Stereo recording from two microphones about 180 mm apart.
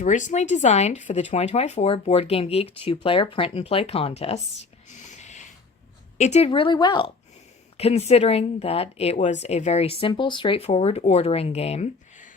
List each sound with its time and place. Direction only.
0.0 s speech: 45° left (ahead or behind)
4.9 s whispering: 40° left (ahead or behind)
6.1 s a woman's voice: 40° left (ahead or behind)